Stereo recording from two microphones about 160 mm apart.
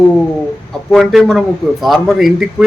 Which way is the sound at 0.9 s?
Centre (ahead or behind).